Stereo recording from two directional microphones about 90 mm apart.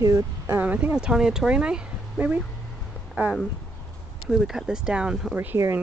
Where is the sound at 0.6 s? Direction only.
20° right (ahead or behind).